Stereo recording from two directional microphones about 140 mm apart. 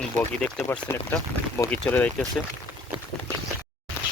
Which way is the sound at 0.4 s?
10° left (ahead or behind).